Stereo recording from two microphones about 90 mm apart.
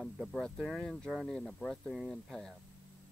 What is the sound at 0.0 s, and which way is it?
Speech, 5° left (ahead or behind).